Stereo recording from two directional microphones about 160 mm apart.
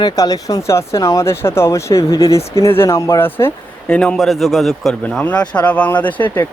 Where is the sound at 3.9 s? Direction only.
5° left (ahead or behind).